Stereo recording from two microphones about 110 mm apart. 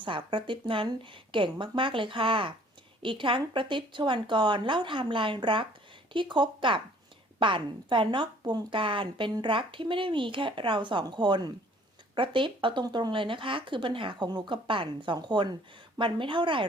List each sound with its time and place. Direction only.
0.0 s speech: 45° right (ahead or behind)